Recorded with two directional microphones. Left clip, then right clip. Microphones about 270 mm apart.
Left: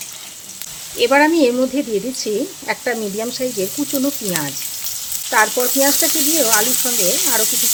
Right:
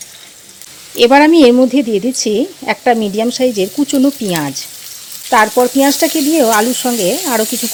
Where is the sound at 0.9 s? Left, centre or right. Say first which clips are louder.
Right 6 dB; right.